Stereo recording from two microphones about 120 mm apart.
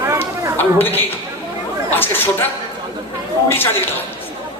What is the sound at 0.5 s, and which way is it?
Speech, 15° left (ahead or behind).